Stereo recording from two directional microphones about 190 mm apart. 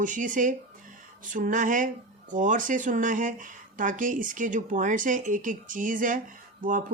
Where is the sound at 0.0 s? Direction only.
45° right (ahead or behind).